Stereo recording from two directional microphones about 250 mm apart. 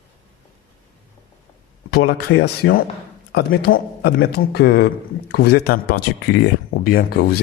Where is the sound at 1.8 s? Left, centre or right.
Left.